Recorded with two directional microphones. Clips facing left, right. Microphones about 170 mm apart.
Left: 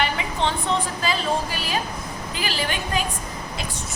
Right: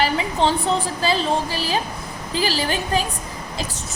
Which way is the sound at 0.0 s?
35° right (ahead or behind).